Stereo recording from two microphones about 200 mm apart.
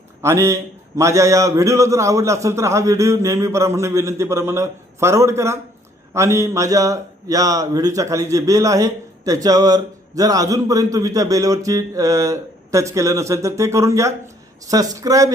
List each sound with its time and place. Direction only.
0.2 s a man's voice: 15° right (ahead or behind)